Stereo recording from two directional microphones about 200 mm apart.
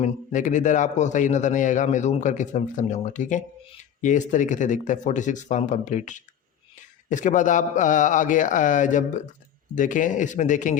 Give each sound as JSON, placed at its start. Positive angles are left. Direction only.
{"t": 0.0, "sound": "a man's voice", "side_deg": 40}